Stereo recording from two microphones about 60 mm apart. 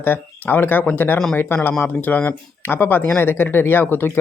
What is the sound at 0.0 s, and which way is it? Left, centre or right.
Speech, left.